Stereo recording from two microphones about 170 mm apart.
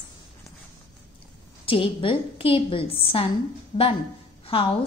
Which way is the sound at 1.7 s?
30° left (ahead or behind).